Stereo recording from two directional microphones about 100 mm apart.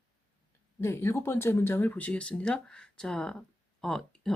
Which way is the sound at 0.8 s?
25° left (ahead or behind).